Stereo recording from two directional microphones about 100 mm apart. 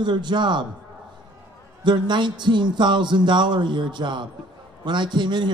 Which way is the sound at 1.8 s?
50° right (ahead or behind).